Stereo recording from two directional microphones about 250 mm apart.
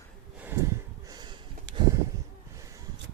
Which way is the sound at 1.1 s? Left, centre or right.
Centre.